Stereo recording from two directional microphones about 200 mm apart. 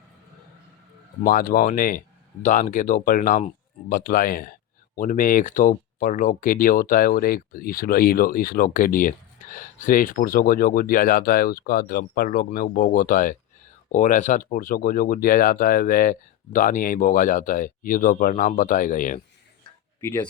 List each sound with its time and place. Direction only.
1.2 s speech: 45° left (ahead or behind)
20.0 s speech: 10° left (ahead or behind)